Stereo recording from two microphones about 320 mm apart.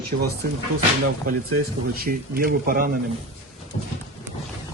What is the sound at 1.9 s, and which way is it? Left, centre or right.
Speech, right.